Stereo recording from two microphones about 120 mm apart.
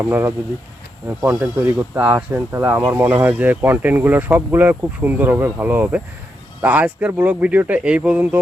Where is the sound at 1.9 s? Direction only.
15° right (ahead or behind).